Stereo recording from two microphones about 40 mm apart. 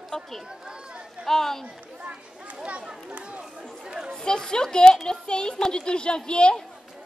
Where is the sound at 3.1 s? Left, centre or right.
Right.